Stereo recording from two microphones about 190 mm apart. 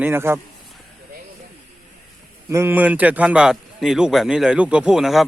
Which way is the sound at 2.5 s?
15° right (ahead or behind).